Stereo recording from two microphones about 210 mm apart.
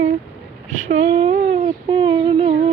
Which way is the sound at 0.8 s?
30° right (ahead or behind).